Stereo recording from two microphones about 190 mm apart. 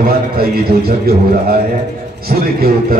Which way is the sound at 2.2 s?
55° right (ahead or behind).